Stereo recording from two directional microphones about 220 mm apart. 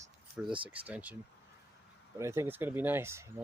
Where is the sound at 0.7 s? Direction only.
5° right (ahead or behind).